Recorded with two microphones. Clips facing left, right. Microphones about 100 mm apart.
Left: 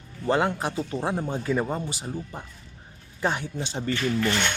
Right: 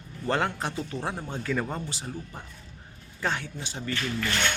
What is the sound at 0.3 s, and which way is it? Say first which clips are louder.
A man's voice: left 4 dB; 10° left (ahead or behind).